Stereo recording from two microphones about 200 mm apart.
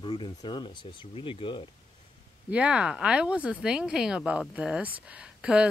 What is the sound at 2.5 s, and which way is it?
Speech, 5° right (ahead or behind).